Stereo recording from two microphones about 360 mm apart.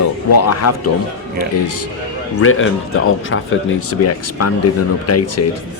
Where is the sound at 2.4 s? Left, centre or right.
Left.